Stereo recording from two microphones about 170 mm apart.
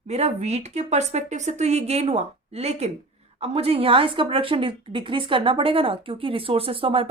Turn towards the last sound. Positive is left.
turn(degrees=-30)  # may be behind; listen again after turning